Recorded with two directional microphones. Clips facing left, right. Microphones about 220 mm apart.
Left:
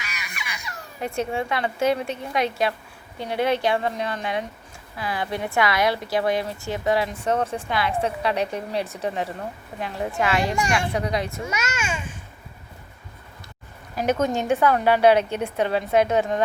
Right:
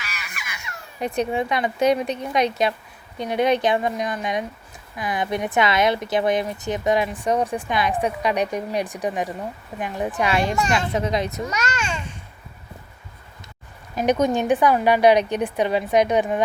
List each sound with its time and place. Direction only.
1.0 s a woman's voice: 20° right (ahead or behind)
11.4 s a child's voice: 10° left (ahead or behind)
13.9 s a woman's voice: 20° right (ahead or behind)